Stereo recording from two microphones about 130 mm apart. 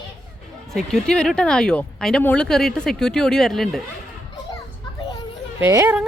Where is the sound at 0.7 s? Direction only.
5° left (ahead or behind).